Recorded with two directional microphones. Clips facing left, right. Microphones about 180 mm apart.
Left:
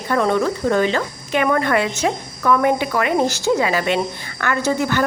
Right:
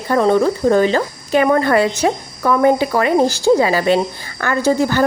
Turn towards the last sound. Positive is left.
turn(degrees=-35)  # may be behind; listen again after turning